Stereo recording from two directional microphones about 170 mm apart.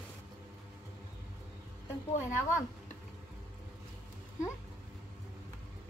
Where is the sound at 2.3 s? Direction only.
15° left (ahead or behind).